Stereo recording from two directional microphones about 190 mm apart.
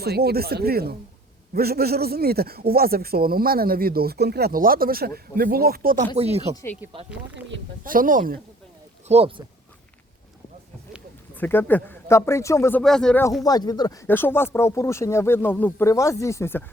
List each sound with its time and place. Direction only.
0.0 s a man's voice: 55° right (ahead or behind)
6.1 s speech: 35° right (ahead or behind)
7.9 s a man's voice: 45° right (ahead or behind)
9.0 s speech: 35° right (ahead or behind)
11.3 s speech: 10° left (ahead or behind)
12.8 s speech: 5° left (ahead or behind)
13.4 s speech: 20° left (ahead or behind)